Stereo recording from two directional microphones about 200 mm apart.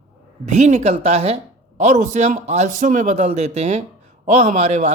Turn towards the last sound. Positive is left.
turn(degrees=-35)  # may be behind; listen again after turning